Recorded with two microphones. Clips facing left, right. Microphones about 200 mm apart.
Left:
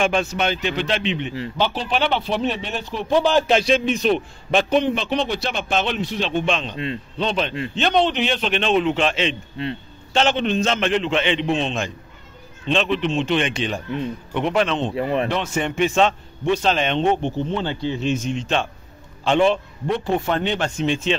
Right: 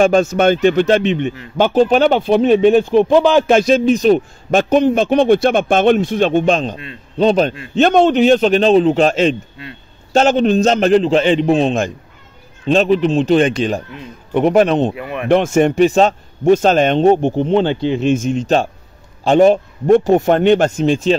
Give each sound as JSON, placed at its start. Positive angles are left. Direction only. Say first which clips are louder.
{"t": 0.0, "sound": "a man's voice", "louder": "right 9 dB", "side_deg": -45}
{"t": 15.0, "sound": "speech", "louder": "left 4 dB", "side_deg": 30}
{"t": 15.2, "sound": "a man's voice", "louder": "right 11 dB", "side_deg": -50}
{"t": 17.4, "sound": "speech", "louder": "right 10 dB", "side_deg": -70}
{"t": 18.0, "sound": "a man's voice", "louder": "right 8 dB", "side_deg": -50}